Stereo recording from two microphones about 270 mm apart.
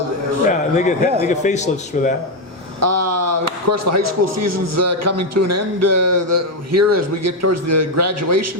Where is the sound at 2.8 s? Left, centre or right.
Right.